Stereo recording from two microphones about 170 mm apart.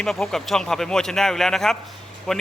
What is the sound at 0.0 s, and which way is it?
A man's voice, centre (ahead or behind).